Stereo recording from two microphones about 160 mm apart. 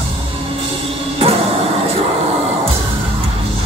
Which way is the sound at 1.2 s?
35° right (ahead or behind).